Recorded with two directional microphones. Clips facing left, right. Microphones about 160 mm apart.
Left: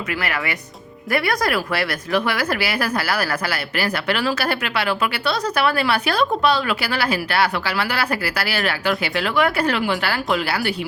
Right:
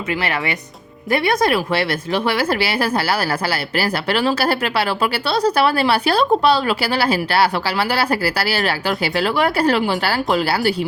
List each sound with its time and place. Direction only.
0.2 s a woman's voice: 25° right (ahead or behind)